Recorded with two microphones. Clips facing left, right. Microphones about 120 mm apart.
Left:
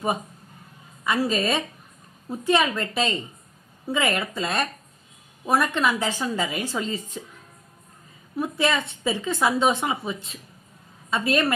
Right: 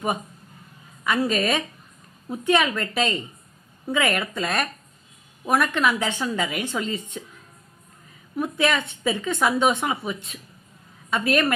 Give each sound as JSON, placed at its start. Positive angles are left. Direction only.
{"t": 1.3, "sound": "a woman's voice", "side_deg": 30}
{"t": 8.4, "sound": "a woman's voice", "side_deg": 30}